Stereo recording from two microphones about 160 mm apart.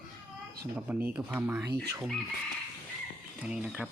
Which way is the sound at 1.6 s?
90° right.